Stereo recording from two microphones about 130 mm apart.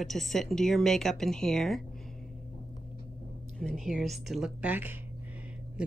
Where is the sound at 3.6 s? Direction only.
Centre (ahead or behind).